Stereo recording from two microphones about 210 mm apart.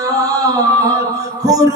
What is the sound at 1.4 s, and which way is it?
Music, 15° right (ahead or behind).